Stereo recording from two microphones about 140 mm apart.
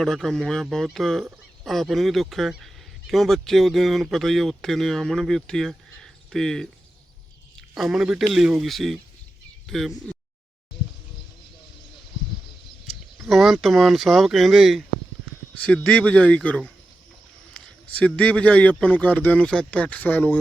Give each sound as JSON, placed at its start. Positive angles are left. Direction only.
{"t": 0.0, "sound": "speech", "side_deg": 0}
{"t": 13.3, "sound": "speech", "side_deg": 0}
{"t": 15.5, "sound": "a man's voice", "side_deg": 10}